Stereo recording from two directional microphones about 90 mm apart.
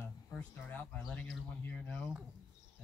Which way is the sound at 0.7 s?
15° left (ahead or behind).